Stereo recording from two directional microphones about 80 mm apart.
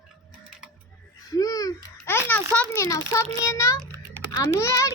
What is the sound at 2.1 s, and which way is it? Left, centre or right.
Speech, left.